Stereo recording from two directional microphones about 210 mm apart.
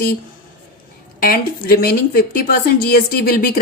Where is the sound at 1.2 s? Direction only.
45° left (ahead or behind).